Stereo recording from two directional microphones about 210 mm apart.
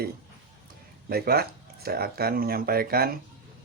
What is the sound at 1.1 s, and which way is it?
Speech, 45° right (ahead or behind).